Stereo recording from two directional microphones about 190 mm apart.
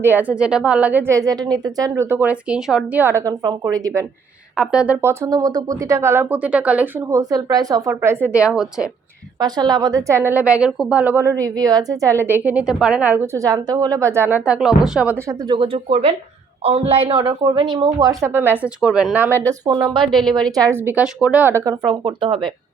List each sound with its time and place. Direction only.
0.0 s a woman's voice: 10° right (ahead or behind)
4.5 s a woman's voice: 5° right (ahead or behind)
9.4 s a woman's voice: 20° right (ahead or behind)
15.4 s a woman's voice: 25° right (ahead or behind); by 19.3 s 5° right (ahead or behind)
19.4 s speech: 20° right (ahead or behind)
20.1 s a woman's voice: centre (ahead or behind)
20.7 s a woman's voice: 10° right (ahead or behind); by 22.4 s 25° right (ahead or behind)